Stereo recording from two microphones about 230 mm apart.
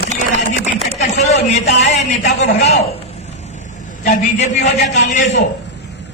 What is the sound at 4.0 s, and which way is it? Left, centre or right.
Speech, left.